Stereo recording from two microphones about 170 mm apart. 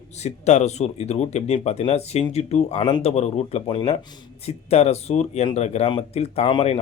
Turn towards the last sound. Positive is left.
turn(degrees=30)  # may be behind; listen again after turning